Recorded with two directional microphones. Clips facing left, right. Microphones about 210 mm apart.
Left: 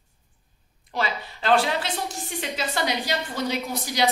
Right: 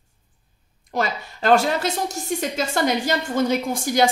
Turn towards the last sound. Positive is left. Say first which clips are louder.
# right 5 dB
turn(degrees=-50)  # may be behind; listen again after turning